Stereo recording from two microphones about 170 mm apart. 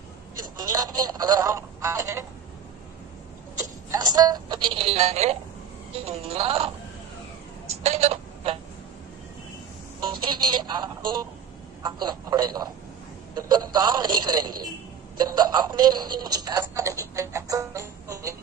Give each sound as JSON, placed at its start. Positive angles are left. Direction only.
{"t": 0.6, "sound": "speech", "side_deg": -20}
{"t": 3.6, "sound": "a woman's voice", "side_deg": -25}
{"t": 7.9, "sound": "speech", "side_deg": -40}
{"t": 10.0, "sound": "speech", "side_deg": -25}